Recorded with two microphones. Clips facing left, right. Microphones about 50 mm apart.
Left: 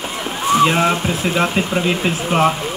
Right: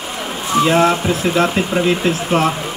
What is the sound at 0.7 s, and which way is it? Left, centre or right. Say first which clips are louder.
Speech: right 3 dB; centre.